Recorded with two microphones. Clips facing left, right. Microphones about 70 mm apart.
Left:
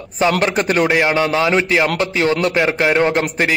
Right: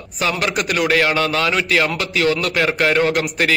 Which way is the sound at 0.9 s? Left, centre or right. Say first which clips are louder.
Left 2 dB; centre.